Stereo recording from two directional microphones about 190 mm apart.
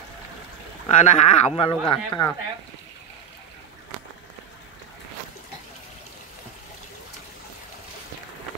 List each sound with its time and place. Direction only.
0.8 s speech: 35° left (ahead or behind)